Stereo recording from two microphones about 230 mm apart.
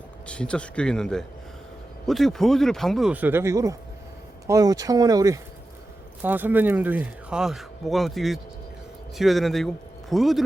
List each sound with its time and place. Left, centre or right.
0.3 s speech: centre